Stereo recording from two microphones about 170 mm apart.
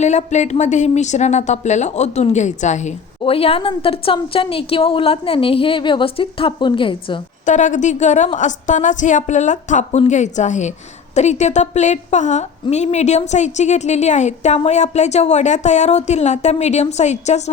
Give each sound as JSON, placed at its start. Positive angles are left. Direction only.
{"t": 0.0, "sound": "speech", "side_deg": 45}
{"t": 7.4, "sound": "a woman's voice", "side_deg": 45}